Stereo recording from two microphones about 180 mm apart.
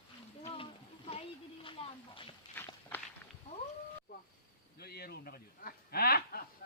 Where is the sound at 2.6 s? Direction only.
10° left (ahead or behind).